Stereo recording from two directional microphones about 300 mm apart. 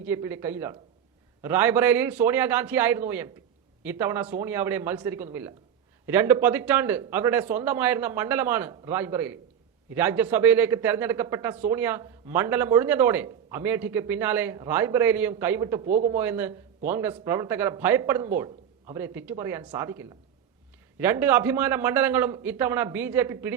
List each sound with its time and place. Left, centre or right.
0.0 s a man's voice: centre
15.9 s a man's voice: right
16.1 s a man's voice: centre